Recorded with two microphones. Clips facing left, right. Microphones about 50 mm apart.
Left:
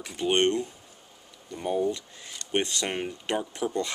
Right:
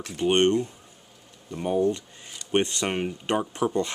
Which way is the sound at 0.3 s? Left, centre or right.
Right.